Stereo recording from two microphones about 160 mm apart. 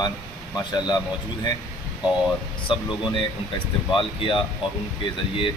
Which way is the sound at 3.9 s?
30° left (ahead or behind).